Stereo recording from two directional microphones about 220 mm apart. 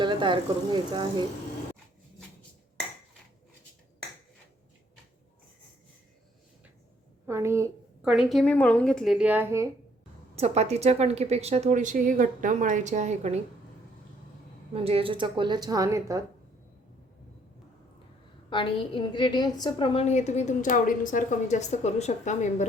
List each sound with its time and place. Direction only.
0.0 s speech: 20° right (ahead or behind)
7.3 s a sound: 10° right (ahead or behind)
8.1 s speech: centre (ahead or behind)
10.3 s speech: 30° right (ahead or behind)
14.7 s speech: 25° right (ahead or behind)
18.5 s a woman's voice: 20° left (ahead or behind)